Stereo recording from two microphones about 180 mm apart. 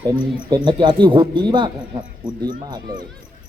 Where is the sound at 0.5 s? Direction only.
25° right (ahead or behind).